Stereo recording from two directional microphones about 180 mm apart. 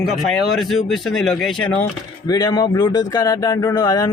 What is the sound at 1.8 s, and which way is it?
Speech, 20° left (ahead or behind).